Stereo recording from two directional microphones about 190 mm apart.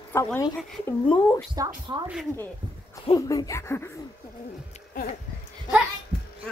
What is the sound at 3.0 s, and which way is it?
Speech, 20° left (ahead or behind).